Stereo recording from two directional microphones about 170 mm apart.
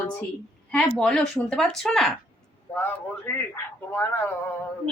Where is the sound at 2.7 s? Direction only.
10° left (ahead or behind).